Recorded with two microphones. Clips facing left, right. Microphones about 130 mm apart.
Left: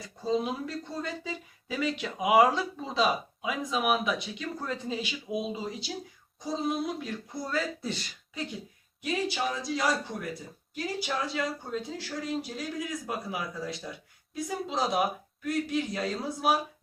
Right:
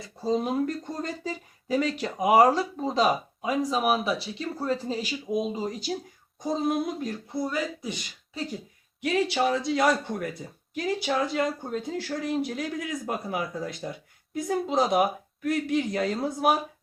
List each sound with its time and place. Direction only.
0.0 s speech: 35° right (ahead or behind)
7.3 s speech: 20° right (ahead or behind)
9.0 s speech: 65° right (ahead or behind)